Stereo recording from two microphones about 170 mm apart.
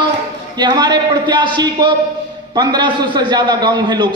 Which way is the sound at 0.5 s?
25° right (ahead or behind).